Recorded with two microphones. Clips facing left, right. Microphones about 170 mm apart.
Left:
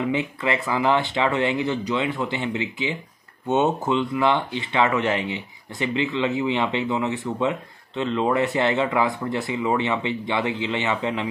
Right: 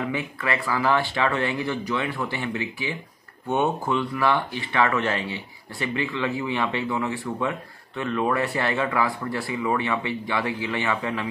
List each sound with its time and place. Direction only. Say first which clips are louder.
0.1 s speech: left 3 dB; 20° left (ahead or behind)